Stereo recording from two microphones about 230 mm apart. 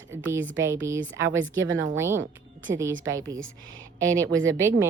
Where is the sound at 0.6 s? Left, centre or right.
Centre.